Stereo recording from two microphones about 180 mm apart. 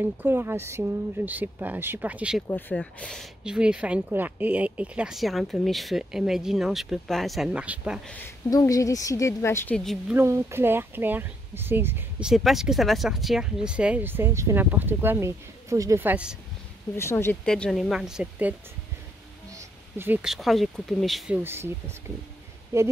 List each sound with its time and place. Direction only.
0.0 s speech: 10° right (ahead or behind)
2.4 s speech: 10° left (ahead or behind)
8.5 s a woman's voice: 20° left (ahead or behind); by 10.1 s 5° left (ahead or behind)
10.1 s speech: 15° right (ahead or behind)
16.9 s a woman's voice: 15° left (ahead or behind)
17.5 s speech: centre (ahead or behind)
19.5 s speech: 10° right (ahead or behind)
21.4 s speech: 15° right (ahead or behind)